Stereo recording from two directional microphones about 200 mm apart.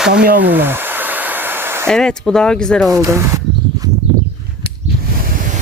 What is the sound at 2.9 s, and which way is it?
Speech, 15° right (ahead or behind).